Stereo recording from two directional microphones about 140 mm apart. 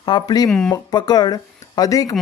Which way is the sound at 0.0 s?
30° left (ahead or behind).